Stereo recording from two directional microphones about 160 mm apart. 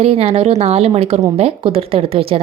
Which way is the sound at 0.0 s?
40° right (ahead or behind).